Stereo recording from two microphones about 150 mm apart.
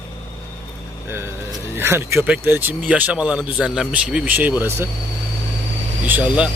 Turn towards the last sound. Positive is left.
turn(degrees=-10)  # may be behind; listen again after turning